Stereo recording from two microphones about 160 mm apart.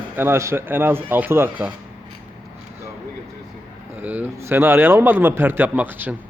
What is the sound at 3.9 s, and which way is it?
A man's voice, 10° right (ahead or behind).